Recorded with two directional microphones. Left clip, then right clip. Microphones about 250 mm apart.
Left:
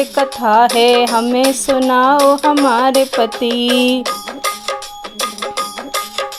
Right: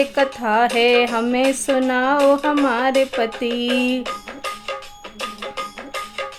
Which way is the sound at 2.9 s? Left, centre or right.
Left.